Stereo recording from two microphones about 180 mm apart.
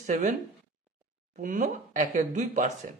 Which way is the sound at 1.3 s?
45° right (ahead or behind).